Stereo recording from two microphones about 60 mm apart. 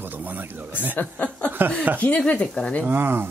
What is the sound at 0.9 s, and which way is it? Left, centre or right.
Speech, left.